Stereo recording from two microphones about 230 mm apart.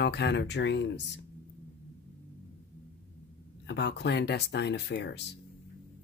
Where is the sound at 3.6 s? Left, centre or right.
Left.